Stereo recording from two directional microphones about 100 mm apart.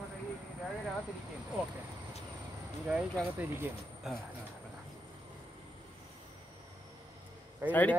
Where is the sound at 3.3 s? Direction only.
20° right (ahead or behind).